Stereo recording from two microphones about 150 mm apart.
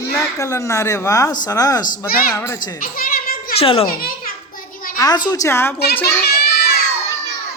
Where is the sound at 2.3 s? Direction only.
15° left (ahead or behind).